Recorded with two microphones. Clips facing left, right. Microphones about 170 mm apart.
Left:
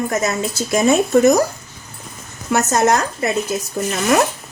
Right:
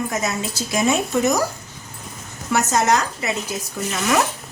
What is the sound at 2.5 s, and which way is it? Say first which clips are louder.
Speech: left 3 dB; 50° left (ahead or behind).